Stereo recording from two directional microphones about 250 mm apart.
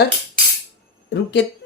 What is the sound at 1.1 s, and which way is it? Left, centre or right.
Speech, left.